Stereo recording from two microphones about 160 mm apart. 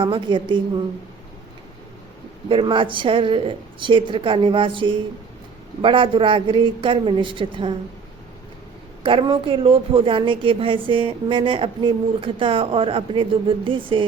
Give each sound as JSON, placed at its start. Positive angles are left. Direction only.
{"t": 0.0, "sound": "a woman's voice", "side_deg": -30}
{"t": 2.5, "sound": "a woman's voice", "side_deg": -35}
{"t": 9.0, "sound": "a woman's voice", "side_deg": -30}